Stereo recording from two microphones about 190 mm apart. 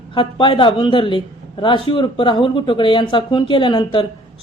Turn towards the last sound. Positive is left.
turn(degrees=25)  # may be behind; listen again after turning